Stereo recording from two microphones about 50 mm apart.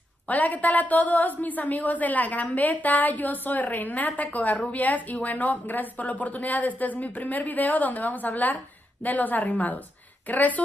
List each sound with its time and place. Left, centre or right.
0.3 s a woman's voice: left